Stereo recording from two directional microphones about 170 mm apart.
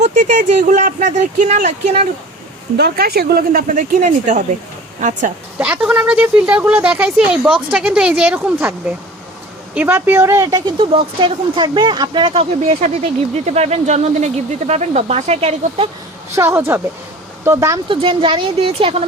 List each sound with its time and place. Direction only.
0.0 s speech: 45° right (ahead or behind)
2.7 s speech: 70° right (ahead or behind); by 5.3 s 50° right (ahead or behind)
5.5 s speech: 10° right (ahead or behind)
9.7 s speech: 10° right (ahead or behind)
10.8 s speech: 30° right (ahead or behind)
16.3 s speech: 15° right (ahead or behind)
17.8 s speech: 30° right (ahead or behind)